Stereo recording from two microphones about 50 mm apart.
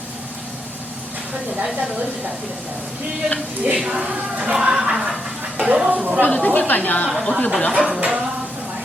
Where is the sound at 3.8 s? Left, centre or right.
Centre.